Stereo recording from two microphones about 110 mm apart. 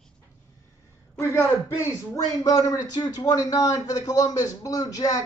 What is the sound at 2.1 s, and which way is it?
A man's voice, 30° left (ahead or behind).